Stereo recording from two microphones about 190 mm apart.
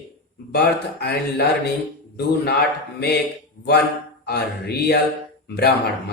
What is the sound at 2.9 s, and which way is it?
Speech, 55° left (ahead or behind).